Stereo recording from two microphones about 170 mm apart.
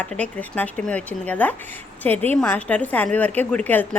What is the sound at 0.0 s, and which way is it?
A woman's voice, 10° left (ahead or behind).